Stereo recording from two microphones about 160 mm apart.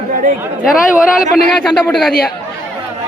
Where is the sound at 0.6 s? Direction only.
Centre (ahead or behind).